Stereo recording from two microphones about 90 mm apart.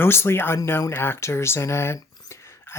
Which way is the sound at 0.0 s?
25° left (ahead or behind).